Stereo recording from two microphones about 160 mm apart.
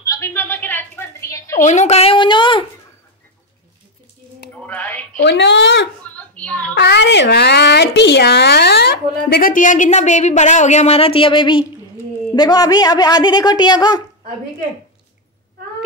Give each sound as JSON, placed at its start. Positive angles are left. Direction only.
{"t": 0.0, "sound": "a sound", "side_deg": 20}
{"t": 1.6, "sound": "a woman's voice", "side_deg": 45}
{"t": 4.6, "sound": "speech", "side_deg": 10}
{"t": 5.2, "sound": "speech", "side_deg": 90}
{"t": 6.1, "sound": "a sound", "side_deg": 10}
{"t": 6.7, "sound": "a woman's voice", "side_deg": 90}